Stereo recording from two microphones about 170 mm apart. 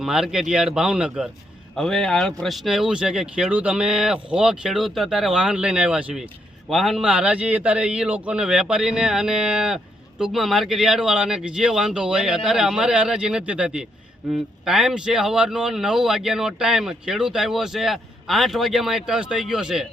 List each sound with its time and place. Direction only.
0.0 s a man's voice: 5° right (ahead or behind)